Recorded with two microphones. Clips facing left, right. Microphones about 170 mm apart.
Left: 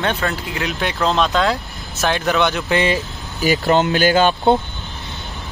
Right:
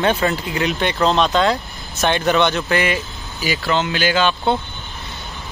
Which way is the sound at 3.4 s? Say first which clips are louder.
Left 5 dB; 45° left (ahead or behind).